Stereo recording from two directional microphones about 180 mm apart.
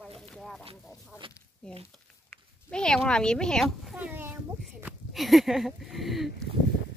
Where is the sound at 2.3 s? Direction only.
5° left (ahead or behind); by 4.4 s 10° right (ahead or behind).